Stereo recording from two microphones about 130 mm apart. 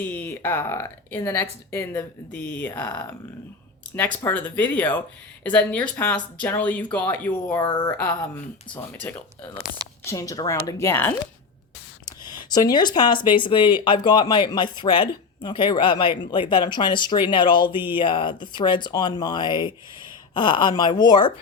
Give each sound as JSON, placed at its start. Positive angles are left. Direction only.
{"t": 0.0, "sound": "speech", "side_deg": 15}
{"t": 3.9, "sound": "speech", "side_deg": 15}
{"t": 7.6, "sound": "speech", "side_deg": 40}
{"t": 7.9, "sound": "a woman's voice", "side_deg": 10}
{"t": 12.0, "sound": "speech", "side_deg": 30}